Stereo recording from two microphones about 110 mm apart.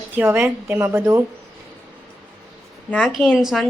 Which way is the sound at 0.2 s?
20° right (ahead or behind).